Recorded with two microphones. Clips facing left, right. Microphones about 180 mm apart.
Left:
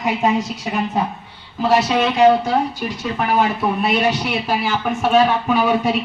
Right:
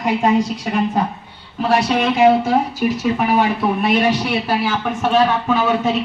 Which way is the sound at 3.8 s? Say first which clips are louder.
Right 2 dB; 10° left (ahead or behind).